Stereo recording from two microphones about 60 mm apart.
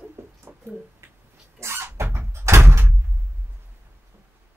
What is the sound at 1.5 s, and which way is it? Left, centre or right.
Vehicle, right.